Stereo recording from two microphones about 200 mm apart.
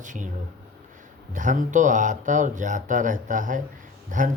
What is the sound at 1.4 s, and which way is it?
Speech, 40° right (ahead or behind).